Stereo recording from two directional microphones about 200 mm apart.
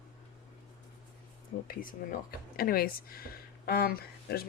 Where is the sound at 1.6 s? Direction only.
45° left (ahead or behind).